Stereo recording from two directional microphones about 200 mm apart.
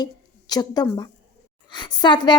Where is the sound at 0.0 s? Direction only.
20° left (ahead or behind).